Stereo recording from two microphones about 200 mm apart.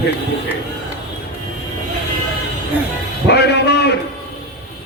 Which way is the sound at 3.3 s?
55° left (ahead or behind).